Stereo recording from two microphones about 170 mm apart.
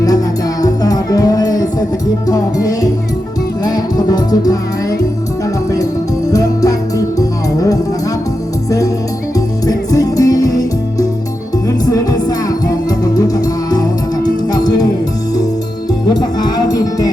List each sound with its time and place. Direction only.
0.6 s music: 20° left (ahead or behind)
6.3 s music: 20° left (ahead or behind)
9.6 s music: 20° left (ahead or behind)
16.0 s music: 20° left (ahead or behind)